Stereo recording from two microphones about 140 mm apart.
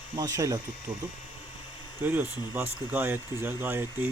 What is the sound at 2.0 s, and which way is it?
Speech, 15° right (ahead or behind).